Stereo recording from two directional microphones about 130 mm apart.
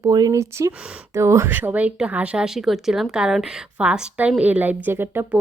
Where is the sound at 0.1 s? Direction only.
30° right (ahead or behind).